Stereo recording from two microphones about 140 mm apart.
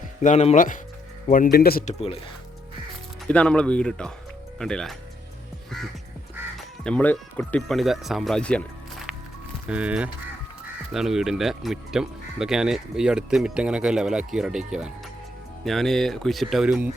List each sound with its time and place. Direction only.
0.2 s speech: 55° left (ahead or behind)
1.3 s speech: 85° left
1.9 s speech: 45° left (ahead or behind)
3.2 s speech: 10° left (ahead or behind)
6.6 s speech: 5° left (ahead or behind)
7.8 s speech: centre (ahead or behind)
9.6 s speech: 10° right (ahead or behind)